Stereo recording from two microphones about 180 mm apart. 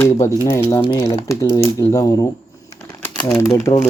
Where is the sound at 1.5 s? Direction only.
30° right (ahead or behind).